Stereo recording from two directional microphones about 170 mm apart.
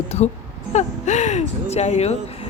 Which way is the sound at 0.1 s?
40° left (ahead or behind).